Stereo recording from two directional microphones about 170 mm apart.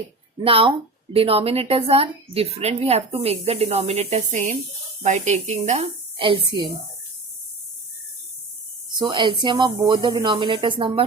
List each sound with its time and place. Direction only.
0.4 s a woman's voice: 30° right (ahead or behind)
9.0 s speech: 30° right (ahead or behind)